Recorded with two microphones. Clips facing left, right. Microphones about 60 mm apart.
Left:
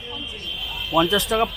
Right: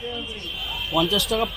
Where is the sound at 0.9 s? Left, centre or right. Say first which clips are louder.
Left 3 dB; left.